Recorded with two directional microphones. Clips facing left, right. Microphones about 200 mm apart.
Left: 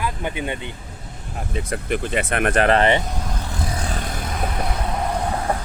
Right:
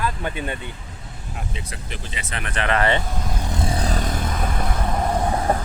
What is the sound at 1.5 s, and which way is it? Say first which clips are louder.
Speech: left 10 dB; 55° left (ahead or behind).